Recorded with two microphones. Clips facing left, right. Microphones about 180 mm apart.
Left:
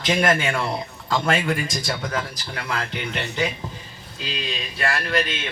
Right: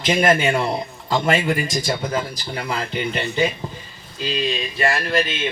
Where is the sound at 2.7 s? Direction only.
5° right (ahead or behind).